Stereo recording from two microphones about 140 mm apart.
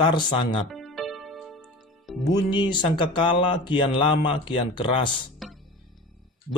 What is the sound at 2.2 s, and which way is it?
Speech, 30° left (ahead or behind).